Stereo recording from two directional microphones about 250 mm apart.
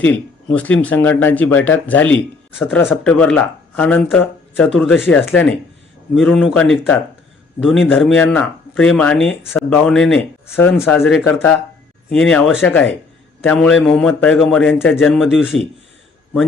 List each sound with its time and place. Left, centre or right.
0.0 s speech: centre